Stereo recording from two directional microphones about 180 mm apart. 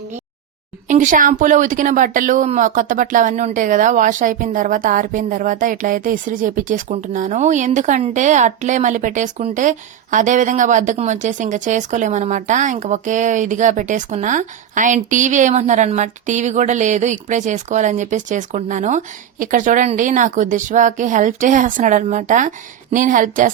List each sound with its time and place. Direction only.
0.9 s a woman's voice: 45° right (ahead or behind)